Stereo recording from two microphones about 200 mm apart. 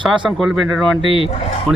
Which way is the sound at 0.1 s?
Centre (ahead or behind).